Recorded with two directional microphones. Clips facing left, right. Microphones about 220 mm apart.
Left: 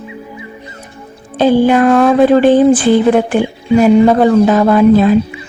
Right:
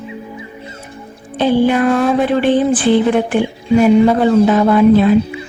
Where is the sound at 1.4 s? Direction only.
45° left (ahead or behind).